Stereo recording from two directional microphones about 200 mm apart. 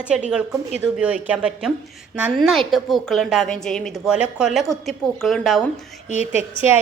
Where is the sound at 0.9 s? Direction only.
5° right (ahead or behind).